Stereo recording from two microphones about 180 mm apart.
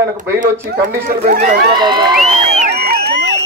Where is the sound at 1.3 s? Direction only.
60° right (ahead or behind).